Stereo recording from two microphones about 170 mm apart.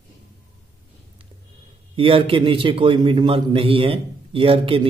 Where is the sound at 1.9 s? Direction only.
35° right (ahead or behind).